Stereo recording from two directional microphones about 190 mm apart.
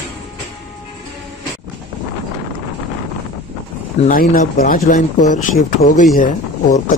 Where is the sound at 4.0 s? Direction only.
45° left (ahead or behind).